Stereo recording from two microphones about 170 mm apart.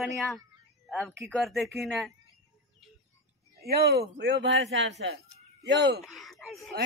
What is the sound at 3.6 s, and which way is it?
Speech, 70° right (ahead or behind).